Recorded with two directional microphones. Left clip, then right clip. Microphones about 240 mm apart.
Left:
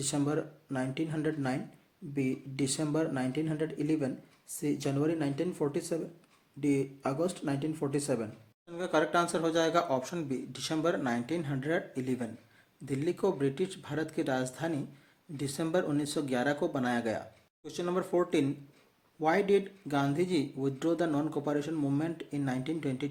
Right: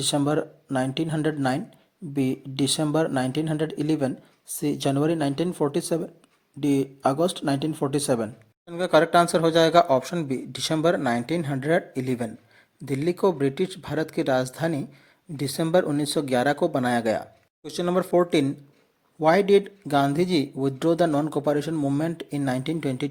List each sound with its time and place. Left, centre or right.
0.0 s speech: right